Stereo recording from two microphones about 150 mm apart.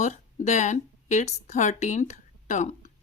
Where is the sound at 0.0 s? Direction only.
55° left (ahead or behind).